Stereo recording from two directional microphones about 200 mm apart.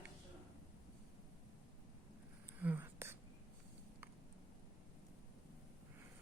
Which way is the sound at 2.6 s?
10° right (ahead or behind).